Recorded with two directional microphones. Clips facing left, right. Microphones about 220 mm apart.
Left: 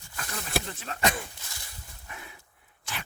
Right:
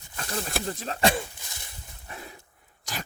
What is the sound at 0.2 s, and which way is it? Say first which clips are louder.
Speech: right 1 dB; 35° right (ahead or behind).